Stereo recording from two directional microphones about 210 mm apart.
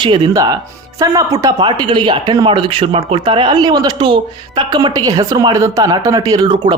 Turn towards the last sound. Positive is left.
turn(degrees=-20)  # may be behind; listen again after turning